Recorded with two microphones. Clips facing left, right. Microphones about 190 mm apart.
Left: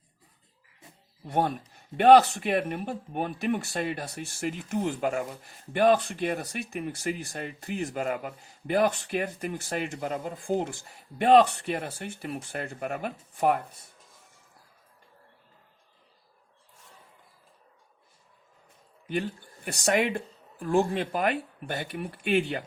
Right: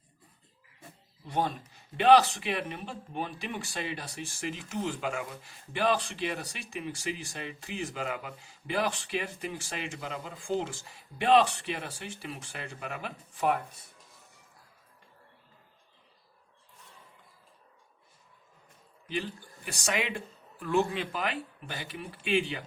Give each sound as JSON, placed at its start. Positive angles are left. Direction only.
{"t": 1.3, "sound": "speech", "side_deg": 60}
{"t": 19.6, "sound": "speech", "side_deg": 60}